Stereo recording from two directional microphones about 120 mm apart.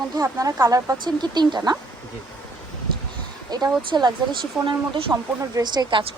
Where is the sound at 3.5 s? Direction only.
35° right (ahead or behind).